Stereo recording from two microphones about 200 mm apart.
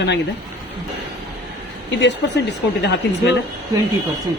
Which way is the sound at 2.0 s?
60° left (ahead or behind).